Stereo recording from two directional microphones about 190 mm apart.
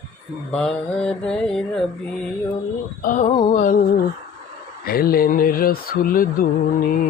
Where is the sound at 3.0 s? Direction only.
40° left (ahead or behind).